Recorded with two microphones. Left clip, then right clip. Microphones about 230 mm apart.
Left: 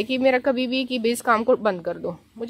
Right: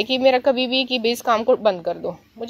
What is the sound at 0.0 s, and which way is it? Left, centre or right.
A woman's voice, left.